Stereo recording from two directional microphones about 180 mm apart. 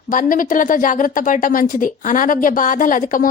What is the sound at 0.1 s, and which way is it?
A woman's voice, 50° left (ahead or behind).